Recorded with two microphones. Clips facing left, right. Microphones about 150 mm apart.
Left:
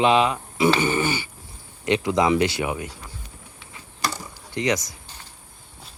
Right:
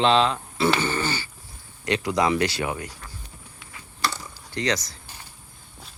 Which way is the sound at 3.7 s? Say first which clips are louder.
Even; 20° left (ahead or behind).